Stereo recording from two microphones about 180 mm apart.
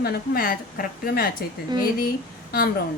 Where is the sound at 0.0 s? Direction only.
55° left (ahead or behind).